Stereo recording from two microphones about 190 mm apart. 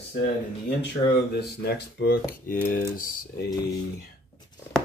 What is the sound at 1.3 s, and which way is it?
Speech, 55° left (ahead or behind).